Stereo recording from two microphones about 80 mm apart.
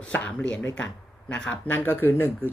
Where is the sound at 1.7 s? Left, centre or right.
Left.